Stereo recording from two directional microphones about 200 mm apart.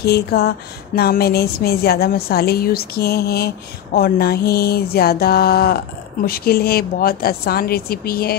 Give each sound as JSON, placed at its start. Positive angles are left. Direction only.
{"t": 0.0, "sound": "a woman's voice", "side_deg": 50}